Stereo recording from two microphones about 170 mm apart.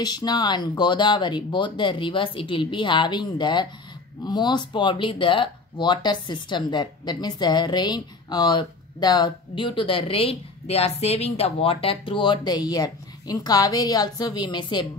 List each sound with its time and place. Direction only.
0.0 s speech: 25° left (ahead or behind)